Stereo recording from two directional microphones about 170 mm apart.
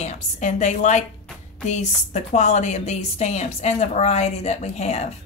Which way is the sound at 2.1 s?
40° left (ahead or behind).